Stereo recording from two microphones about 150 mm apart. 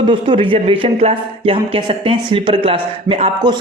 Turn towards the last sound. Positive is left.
turn(degrees=-40)  # may be behind; listen again after turning